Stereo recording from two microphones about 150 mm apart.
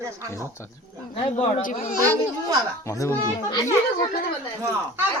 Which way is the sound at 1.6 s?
65° left (ahead or behind).